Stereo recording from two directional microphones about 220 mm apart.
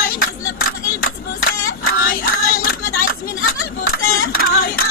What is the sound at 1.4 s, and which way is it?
Music, 40° left (ahead or behind).